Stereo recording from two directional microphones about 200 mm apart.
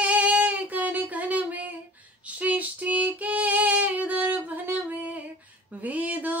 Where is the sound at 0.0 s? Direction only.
5° right (ahead or behind).